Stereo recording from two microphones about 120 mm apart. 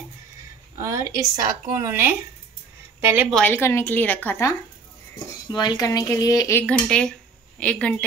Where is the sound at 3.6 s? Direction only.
20° left (ahead or behind).